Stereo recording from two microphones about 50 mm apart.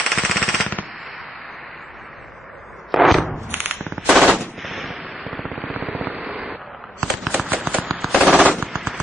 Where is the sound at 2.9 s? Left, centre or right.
Centre.